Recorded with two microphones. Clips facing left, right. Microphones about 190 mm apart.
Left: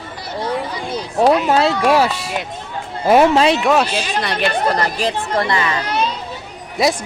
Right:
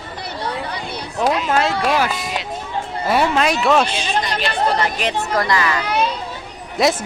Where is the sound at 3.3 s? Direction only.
25° left (ahead or behind).